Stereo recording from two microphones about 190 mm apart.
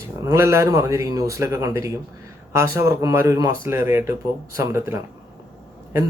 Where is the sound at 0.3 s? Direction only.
15° right (ahead or behind).